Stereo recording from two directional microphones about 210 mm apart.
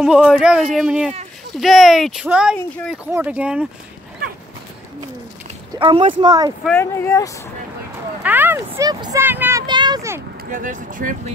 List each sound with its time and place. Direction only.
0.0 s speech: 5° right (ahead or behind)
5.8 s speech: 25° right (ahead or behind)
6.6 s speech: 10° left (ahead or behind)
8.2 s speech: 10° right (ahead or behind)
10.5 s speech: 40° right (ahead or behind)